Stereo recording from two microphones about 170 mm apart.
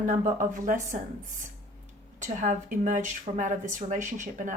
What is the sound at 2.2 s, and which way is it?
Speech, 45° right (ahead or behind).